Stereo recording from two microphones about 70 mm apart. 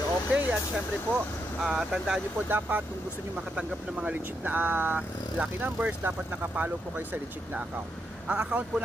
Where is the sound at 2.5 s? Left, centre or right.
Right.